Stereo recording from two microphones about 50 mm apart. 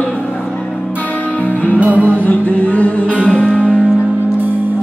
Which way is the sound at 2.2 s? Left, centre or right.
Left.